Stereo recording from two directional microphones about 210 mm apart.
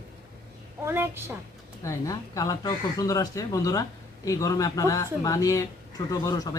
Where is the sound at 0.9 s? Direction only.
10° right (ahead or behind).